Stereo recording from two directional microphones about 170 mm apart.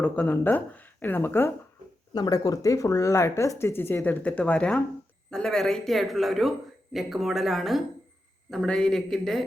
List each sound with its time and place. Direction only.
0.0 s speech: 10° left (ahead or behind)